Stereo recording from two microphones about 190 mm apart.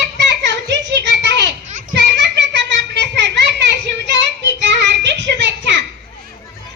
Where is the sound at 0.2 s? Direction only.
65° right (ahead or behind).